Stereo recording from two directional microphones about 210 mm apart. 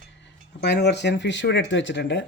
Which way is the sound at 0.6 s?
55° left (ahead or behind).